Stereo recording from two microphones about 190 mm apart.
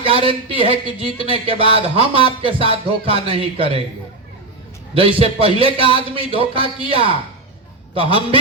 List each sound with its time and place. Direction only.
0.0 s speech: 30° right (ahead or behind)
1.3 s music: 30° right (ahead or behind)
4.9 s music: 30° right (ahead or behind)